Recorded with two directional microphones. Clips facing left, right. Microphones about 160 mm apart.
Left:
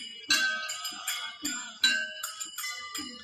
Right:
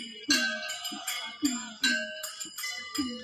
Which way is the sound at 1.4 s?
40° right (ahead or behind).